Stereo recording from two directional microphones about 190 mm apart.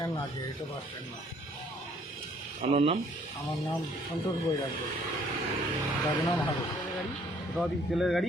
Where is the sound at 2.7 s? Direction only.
30° right (ahead or behind).